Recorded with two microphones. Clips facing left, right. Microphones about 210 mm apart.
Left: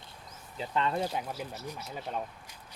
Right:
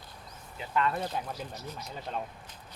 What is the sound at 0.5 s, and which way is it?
Speech, 30° left (ahead or behind).